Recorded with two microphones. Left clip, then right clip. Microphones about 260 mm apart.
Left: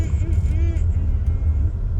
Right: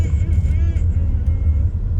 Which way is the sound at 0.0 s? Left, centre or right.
Centre.